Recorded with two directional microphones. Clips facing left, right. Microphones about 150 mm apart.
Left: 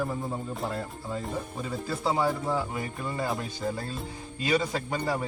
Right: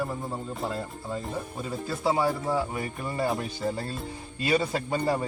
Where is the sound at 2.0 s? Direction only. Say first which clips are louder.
Right 2 dB; 5° right (ahead or behind).